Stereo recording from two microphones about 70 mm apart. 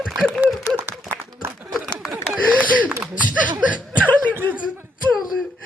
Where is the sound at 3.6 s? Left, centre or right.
Right.